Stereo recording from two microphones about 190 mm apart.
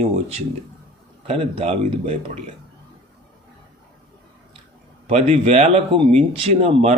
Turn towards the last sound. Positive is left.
turn(degrees=-35)  # may be behind; listen again after turning